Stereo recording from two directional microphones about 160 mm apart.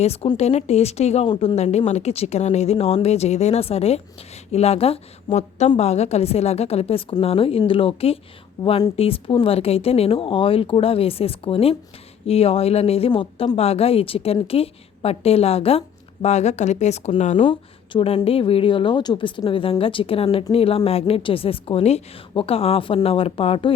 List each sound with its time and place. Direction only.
0.0 s a woman's voice: 40° left (ahead or behind)
8.6 s speech: 20° left (ahead or behind)
9.0 s a woman's voice: 35° left (ahead or behind)
17.3 s a woman's voice: 30° left (ahead or behind)